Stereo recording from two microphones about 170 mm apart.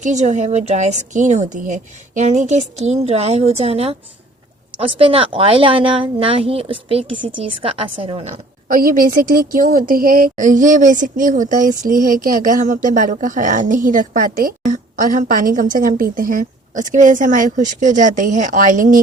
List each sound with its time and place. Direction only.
0.0 s a woman's voice: 45° right (ahead or behind)